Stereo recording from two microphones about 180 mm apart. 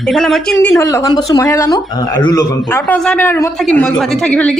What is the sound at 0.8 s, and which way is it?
A woman's voice, 20° left (ahead or behind).